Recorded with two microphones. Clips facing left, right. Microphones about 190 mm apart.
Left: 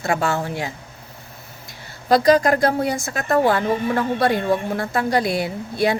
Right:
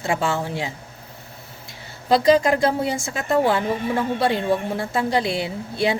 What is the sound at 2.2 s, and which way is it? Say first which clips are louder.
Speech: left 1 dB; 45° left (ahead or behind).